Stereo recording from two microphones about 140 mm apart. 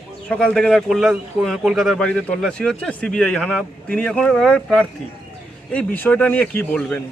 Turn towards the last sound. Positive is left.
turn(degrees=10)  # may be behind; listen again after turning